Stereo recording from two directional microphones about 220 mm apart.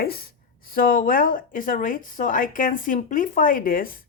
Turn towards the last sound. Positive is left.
turn(degrees=40)  # may be behind; listen again after turning